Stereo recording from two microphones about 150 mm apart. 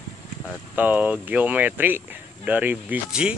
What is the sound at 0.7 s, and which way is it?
Speech, 10° right (ahead or behind).